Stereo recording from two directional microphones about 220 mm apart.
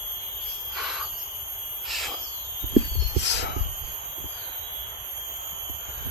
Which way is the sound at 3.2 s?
50° left (ahead or behind).